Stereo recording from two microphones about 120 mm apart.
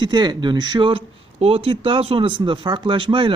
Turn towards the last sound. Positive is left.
turn(degrees=-45)  # may be behind; listen again after turning